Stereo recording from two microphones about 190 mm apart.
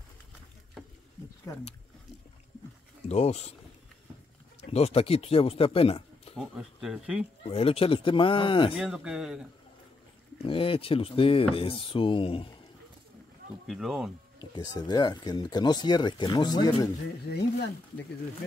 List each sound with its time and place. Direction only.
3.1 s speech: 35° left (ahead or behind)
4.6 s speech: 30° left (ahead or behind)
6.3 s speech: centre (ahead or behind)
7.4 s speech: 30° left (ahead or behind)
8.7 s speech: 5° right (ahead or behind)
10.4 s speech: 30° left (ahead or behind)
13.7 s speech: centre (ahead or behind)
14.7 s speech: 20° left (ahead or behind)